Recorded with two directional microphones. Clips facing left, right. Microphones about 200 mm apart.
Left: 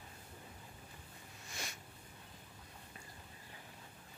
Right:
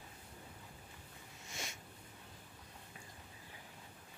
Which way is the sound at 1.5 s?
20° right (ahead or behind).